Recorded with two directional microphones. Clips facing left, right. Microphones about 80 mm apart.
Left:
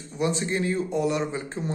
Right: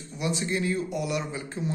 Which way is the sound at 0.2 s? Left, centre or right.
Left.